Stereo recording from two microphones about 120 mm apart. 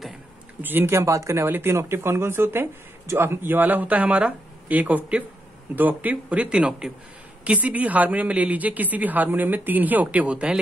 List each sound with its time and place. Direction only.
0.6 s speech: 15° right (ahead or behind)